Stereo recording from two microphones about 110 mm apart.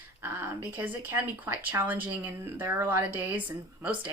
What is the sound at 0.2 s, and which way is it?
Speech, 20° right (ahead or behind).